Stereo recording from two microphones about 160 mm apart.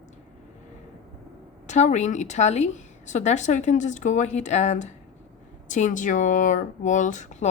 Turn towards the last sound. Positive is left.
turn(degrees=50)  # may be behind; listen again after turning